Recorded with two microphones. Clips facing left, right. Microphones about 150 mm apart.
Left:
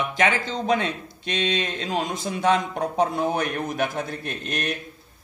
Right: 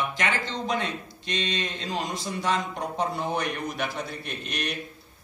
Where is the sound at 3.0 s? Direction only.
50° left (ahead or behind).